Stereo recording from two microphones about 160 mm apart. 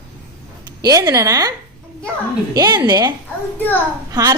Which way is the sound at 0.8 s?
25° right (ahead or behind).